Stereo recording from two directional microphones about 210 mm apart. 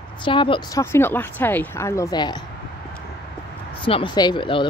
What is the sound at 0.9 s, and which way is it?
A woman's voice, 10° left (ahead or behind).